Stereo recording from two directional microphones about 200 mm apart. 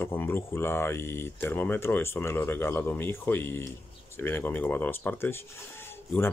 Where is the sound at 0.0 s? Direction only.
10° left (ahead or behind).